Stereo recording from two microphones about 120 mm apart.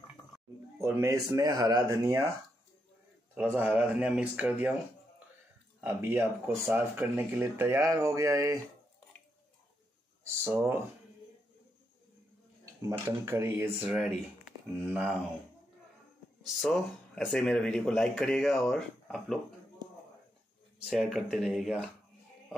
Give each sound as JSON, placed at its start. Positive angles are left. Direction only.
{"t": 0.7, "sound": "speech", "side_deg": -25}
{"t": 3.3, "sound": "speech", "side_deg": -15}
{"t": 5.9, "sound": "speech", "side_deg": -15}
{"t": 10.2, "sound": "speech", "side_deg": -25}
{"t": 13.0, "sound": "speech", "side_deg": -25}
{"t": 13.8, "sound": "speech", "side_deg": -10}
{"t": 16.6, "sound": "speech", "side_deg": 0}
{"t": 20.8, "sound": "speech", "side_deg": 0}